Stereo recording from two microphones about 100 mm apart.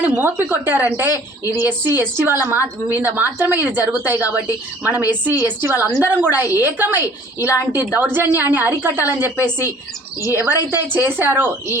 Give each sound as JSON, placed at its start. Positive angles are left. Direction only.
{"t": 0.0, "sound": "a woman's voice", "side_deg": -20}